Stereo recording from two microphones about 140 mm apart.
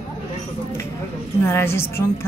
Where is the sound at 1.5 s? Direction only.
15° left (ahead or behind).